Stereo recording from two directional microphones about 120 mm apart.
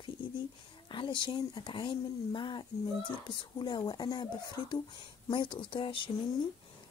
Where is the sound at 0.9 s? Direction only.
40° left (ahead or behind).